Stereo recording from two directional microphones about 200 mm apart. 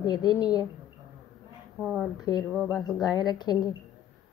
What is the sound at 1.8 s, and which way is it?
Speech, 5° right (ahead or behind).